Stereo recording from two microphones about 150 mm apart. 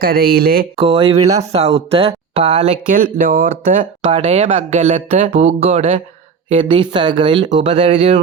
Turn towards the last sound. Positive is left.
turn(degrees=-35)  # may be behind; listen again after turning